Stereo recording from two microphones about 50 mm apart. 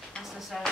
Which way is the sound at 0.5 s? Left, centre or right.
Centre.